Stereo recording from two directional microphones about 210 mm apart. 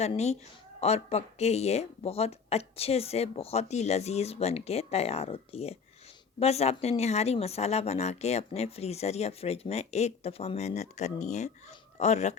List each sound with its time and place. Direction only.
0.0 s speech: 30° left (ahead or behind)